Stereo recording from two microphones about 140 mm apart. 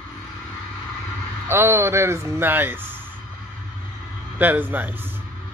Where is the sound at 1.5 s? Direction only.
15° right (ahead or behind).